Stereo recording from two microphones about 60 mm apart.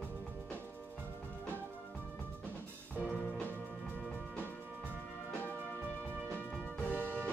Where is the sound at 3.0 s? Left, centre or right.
Left.